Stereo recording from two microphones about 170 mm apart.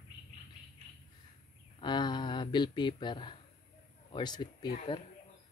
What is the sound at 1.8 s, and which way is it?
Speech, 25° left (ahead or behind).